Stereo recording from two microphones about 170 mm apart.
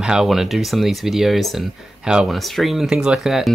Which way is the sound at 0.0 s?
5° right (ahead or behind).